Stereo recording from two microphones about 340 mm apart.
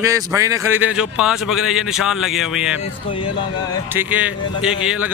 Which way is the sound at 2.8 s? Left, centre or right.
Centre.